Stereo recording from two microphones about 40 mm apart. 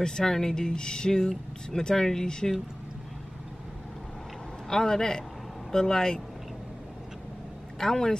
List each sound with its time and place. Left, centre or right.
0.0 s speech: centre
4.6 s speech: centre
7.8 s speech: centre